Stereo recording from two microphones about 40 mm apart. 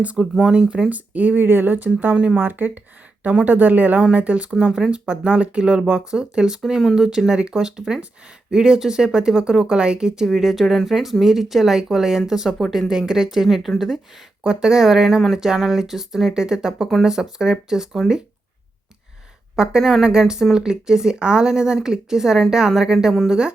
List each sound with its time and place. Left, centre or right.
0.2 s speech: centre
0.9 s speech: right
1.4 s speech: right; by 10.2 s centre
10.2 s speech: centre
14.4 s speech: centre
19.8 s speech: centre
20.1 s speech: centre